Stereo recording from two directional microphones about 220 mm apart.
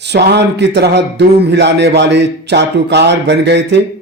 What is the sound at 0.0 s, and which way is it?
A man's voice, 50° right (ahead or behind).